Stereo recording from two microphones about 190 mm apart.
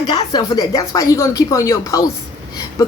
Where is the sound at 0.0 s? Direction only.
20° left (ahead or behind).